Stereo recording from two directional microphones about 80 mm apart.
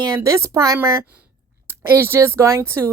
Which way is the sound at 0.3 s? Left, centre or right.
Right.